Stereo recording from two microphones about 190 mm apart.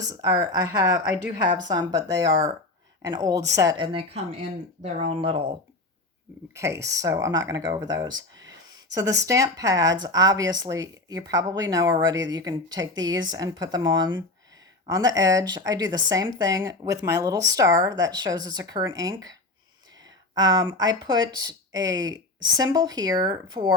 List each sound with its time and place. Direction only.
0.1 s speech: 20° right (ahead or behind)
0.9 s speech: 5° right (ahead or behind)
1.4 s speech: 20° right (ahead or behind)
6.5 s speech: 15° right (ahead or behind)
9.2 s speech: 15° right (ahead or behind)